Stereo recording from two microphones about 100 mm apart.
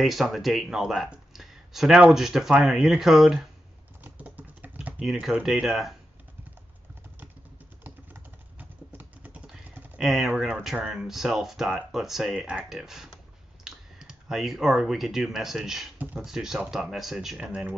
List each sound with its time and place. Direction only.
0.0 s speech: centre (ahead or behind)
4.0 s typing: 15° right (ahead or behind)
7.8 s typing: 20° right (ahead or behind)
9.9 s speech: 5° right (ahead or behind)
16.0 s speech: 15° right (ahead or behind)
16.3 s speech: 5° right (ahead or behind)